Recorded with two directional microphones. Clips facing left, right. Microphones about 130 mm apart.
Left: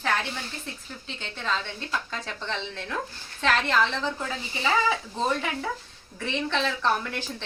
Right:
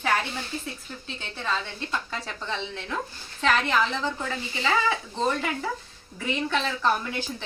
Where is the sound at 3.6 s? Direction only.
15° right (ahead or behind).